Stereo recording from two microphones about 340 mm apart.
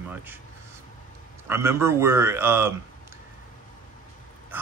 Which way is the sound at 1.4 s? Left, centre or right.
Centre.